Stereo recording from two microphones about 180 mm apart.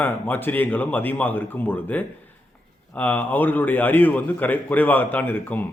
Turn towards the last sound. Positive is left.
turn(degrees=10)  # may be behind; listen again after turning